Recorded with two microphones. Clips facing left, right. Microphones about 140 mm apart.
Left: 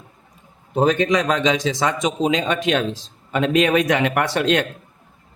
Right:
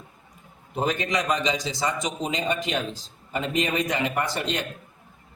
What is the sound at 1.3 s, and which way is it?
Speech, 90° left.